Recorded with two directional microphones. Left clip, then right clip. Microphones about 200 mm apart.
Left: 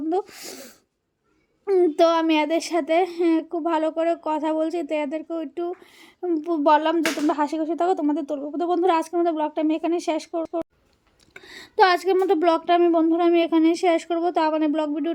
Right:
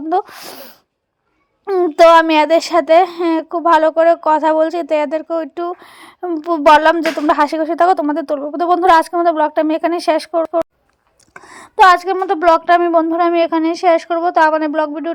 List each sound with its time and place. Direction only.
0.1 s speech: 10° right (ahead or behind)